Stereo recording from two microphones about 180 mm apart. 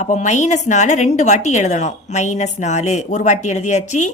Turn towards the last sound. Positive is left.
turn(degrees=40)  # may be behind; listen again after turning